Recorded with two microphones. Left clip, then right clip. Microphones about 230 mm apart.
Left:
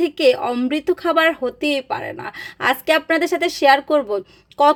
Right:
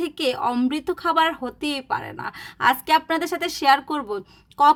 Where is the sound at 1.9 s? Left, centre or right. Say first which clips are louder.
Left 2 dB; centre.